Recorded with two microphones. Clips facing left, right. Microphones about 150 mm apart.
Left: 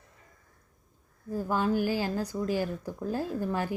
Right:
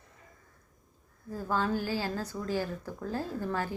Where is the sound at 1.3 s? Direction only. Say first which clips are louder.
Left 3 dB; 15° left (ahead or behind).